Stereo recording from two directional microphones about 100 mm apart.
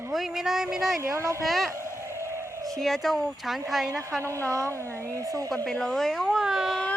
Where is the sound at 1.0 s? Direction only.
30° right (ahead or behind).